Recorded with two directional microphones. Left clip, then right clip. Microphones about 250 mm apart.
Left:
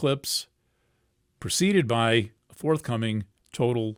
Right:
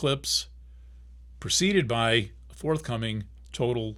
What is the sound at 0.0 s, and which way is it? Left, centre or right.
Speech, left.